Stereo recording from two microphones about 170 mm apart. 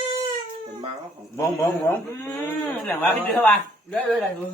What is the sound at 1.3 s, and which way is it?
A man's voice, 15° left (ahead or behind).